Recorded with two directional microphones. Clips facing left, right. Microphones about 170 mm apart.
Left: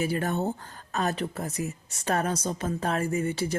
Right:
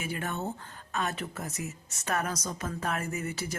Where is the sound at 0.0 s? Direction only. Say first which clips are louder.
Left 7 dB; 35° left (ahead or behind).